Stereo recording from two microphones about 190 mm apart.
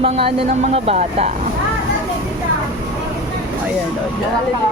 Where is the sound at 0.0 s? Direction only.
30° right (ahead or behind).